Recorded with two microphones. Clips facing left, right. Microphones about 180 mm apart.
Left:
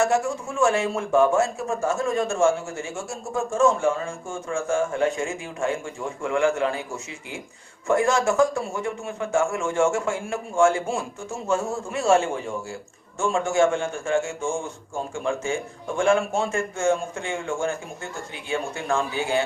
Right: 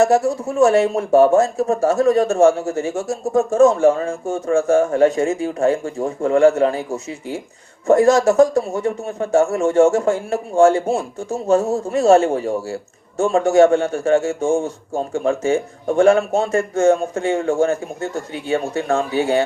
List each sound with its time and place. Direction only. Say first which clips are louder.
0.0 s speech: right 7 dB; 40° right (ahead or behind)